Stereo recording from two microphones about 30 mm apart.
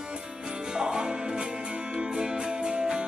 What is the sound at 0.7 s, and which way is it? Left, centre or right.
Music, right.